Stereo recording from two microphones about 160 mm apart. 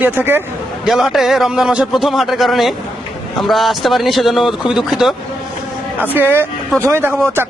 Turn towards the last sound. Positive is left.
turn(degrees=-15)  # may be behind; listen again after turning